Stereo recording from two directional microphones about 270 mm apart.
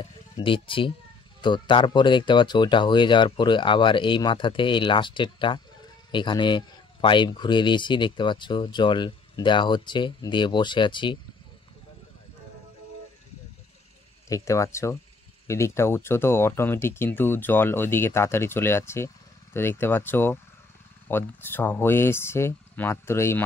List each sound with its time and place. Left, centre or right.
0.0 s speech: centre
14.3 s speech: centre